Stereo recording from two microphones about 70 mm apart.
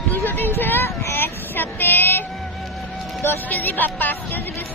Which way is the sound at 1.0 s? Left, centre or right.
Left.